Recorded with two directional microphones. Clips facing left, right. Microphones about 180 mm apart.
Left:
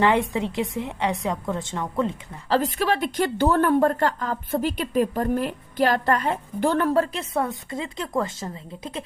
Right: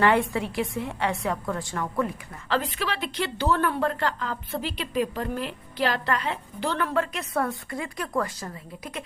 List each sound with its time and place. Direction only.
0.0 s a woman's voice: 20° left (ahead or behind)
2.5 s speech: 45° left (ahead or behind); by 9.0 s 25° left (ahead or behind)